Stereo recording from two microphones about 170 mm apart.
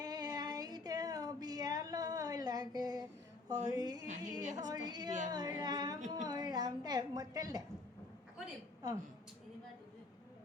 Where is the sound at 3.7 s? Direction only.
20° right (ahead or behind).